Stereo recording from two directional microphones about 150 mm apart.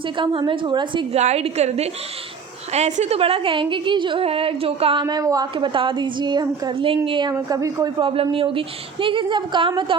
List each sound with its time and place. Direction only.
0.2 s a woman's voice: 35° right (ahead or behind)
1.1 s a woman's voice: 45° right (ahead or behind)
7.3 s a woman's voice: 20° right (ahead or behind)
8.0 s a woman's voice: 35° right (ahead or behind)